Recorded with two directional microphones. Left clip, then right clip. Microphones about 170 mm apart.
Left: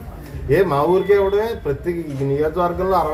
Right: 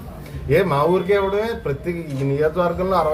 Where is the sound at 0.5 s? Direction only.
10° left (ahead or behind).